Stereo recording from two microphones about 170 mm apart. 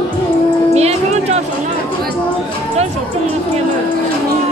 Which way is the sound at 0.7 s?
40° right (ahead or behind).